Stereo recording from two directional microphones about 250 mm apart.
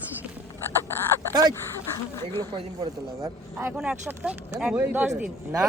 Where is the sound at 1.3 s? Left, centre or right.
Centre.